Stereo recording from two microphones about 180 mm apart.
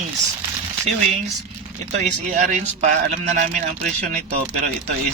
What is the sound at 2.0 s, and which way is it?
Speech, 40° right (ahead or behind).